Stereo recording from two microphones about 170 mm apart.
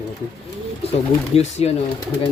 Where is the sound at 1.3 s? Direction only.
40° left (ahead or behind).